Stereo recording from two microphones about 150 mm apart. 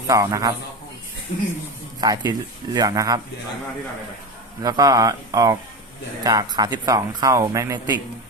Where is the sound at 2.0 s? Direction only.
25° right (ahead or behind).